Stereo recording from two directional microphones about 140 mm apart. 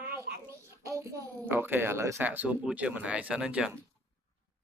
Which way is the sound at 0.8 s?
20° right (ahead or behind).